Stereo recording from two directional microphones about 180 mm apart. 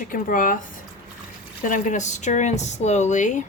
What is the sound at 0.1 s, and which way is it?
Speech, 50° left (ahead or behind).